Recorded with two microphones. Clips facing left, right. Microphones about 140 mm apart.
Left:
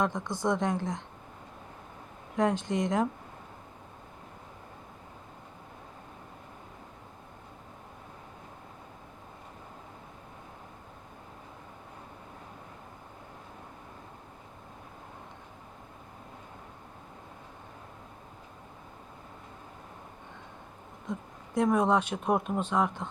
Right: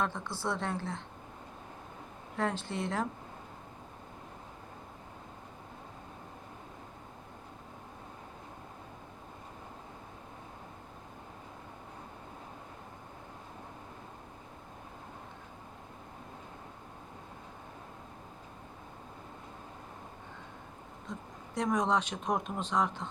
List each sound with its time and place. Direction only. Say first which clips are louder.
0.0 s a woman's voice: left 5 dB; 15° left (ahead or behind)
2.3 s a woman's voice: left 6 dB; 15° left (ahead or behind)
21.1 s speech: left 7 dB; 10° left (ahead or behind)